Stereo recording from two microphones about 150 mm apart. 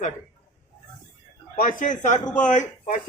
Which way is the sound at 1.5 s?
65° left (ahead or behind).